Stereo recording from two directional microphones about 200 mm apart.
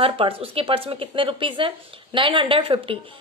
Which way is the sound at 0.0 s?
30° right (ahead or behind).